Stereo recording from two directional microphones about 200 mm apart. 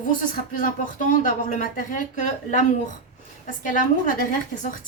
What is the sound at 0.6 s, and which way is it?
A woman's voice, 40° left (ahead or behind).